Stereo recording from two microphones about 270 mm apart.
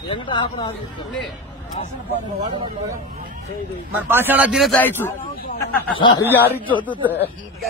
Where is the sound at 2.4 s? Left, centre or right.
Centre.